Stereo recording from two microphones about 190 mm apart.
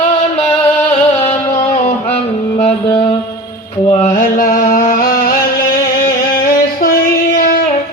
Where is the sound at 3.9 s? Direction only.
40° left (ahead or behind).